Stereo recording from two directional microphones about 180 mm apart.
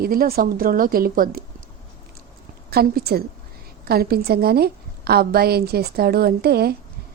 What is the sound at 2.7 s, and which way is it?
A woman's voice, 60° right (ahead or behind).